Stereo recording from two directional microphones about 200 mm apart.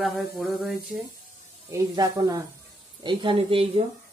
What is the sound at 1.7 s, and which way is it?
Speech, 15° right (ahead or behind).